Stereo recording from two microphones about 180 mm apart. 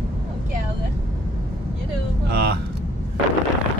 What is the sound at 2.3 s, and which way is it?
Speech, 65° right (ahead or behind).